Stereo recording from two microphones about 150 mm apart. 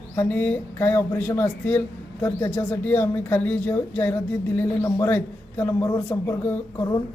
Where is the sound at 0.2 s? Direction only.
10° left (ahead or behind).